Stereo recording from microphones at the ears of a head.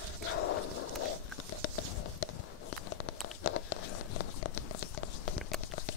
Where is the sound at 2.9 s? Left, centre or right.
Left.